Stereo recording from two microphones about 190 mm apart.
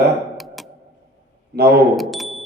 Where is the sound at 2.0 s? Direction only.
Centre (ahead or behind).